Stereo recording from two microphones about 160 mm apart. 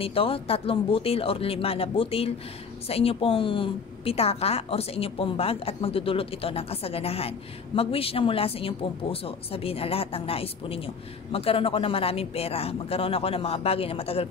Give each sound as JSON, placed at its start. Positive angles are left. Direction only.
{"t": 0.0, "sound": "a woman's voice", "side_deg": 35}